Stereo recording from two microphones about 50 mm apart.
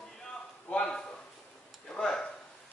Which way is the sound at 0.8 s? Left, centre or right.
Centre.